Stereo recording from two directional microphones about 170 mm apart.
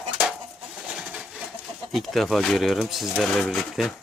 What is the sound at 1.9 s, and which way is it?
Speech, centre (ahead or behind).